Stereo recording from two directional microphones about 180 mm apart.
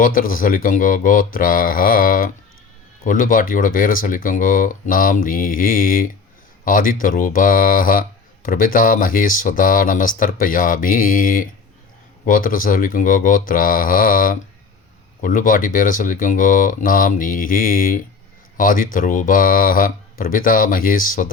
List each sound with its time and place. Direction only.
0.0 s speech: 50° left (ahead or behind)